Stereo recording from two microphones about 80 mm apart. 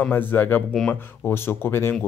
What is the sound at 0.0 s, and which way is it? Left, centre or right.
Speech, left.